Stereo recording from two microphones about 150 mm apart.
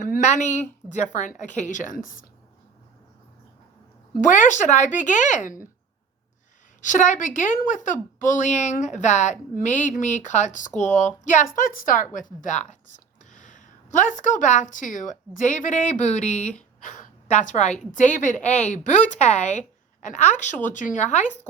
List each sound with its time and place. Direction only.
0.0 s a woman's voice: 55° left (ahead or behind)
4.2 s speech: 55° left (ahead or behind)
6.8 s a woman's voice: 55° left (ahead or behind)